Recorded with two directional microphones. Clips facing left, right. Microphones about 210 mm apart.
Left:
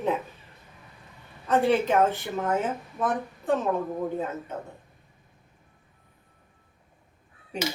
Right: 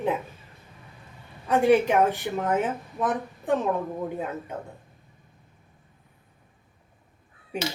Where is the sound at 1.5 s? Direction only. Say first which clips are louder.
Right 3 dB; 10° right (ahead or behind).